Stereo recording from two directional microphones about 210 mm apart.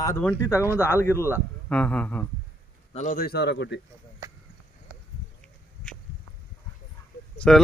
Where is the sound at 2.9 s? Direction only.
40° left (ahead or behind).